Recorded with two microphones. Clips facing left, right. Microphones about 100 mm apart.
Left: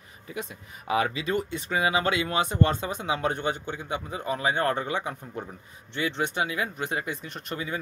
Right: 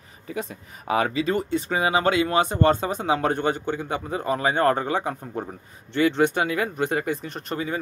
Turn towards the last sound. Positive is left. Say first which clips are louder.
# right 4 dB
turn(degrees=-35)  # may be behind; listen again after turning